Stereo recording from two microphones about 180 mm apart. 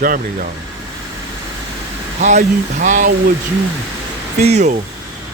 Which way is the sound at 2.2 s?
40° right (ahead or behind).